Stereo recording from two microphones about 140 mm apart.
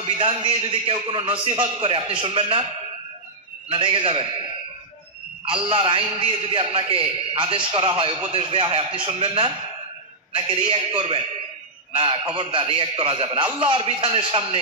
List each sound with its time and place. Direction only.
0.0 s a man's voice: 40° right (ahead or behind)
3.6 s a man's voice: 40° right (ahead or behind)
5.7 s a man's voice: 40° right (ahead or behind)